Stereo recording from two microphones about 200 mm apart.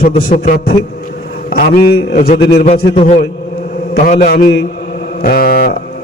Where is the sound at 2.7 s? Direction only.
30° left (ahead or behind); by 5.7 s 50° left (ahead or behind).